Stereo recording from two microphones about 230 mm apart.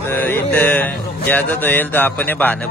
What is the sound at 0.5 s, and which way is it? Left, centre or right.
Speech, centre.